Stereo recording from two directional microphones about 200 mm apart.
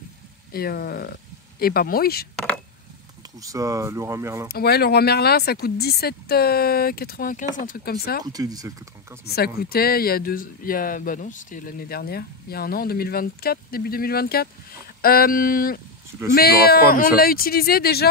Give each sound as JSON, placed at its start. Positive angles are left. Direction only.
{"t": 0.5, "sound": "speech", "side_deg": 50}
{"t": 3.3, "sound": "speech", "side_deg": -15}
{"t": 4.5, "sound": "speech", "side_deg": 50}
{"t": 8.2, "sound": "speech", "side_deg": -20}
{"t": 9.2, "sound": "speech", "side_deg": 50}